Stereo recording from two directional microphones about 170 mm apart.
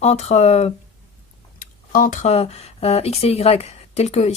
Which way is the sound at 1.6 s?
50° left (ahead or behind).